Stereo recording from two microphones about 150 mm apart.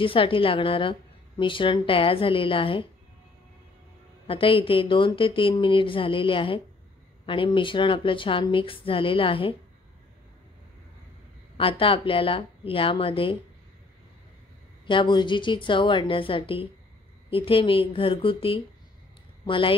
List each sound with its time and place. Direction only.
0.0 s a woman's voice: 35° left (ahead or behind)
4.3 s a woman's voice: 35° left (ahead or behind)
11.5 s a woman's voice: 35° left (ahead or behind)
14.9 s a woman's voice: 30° left (ahead or behind)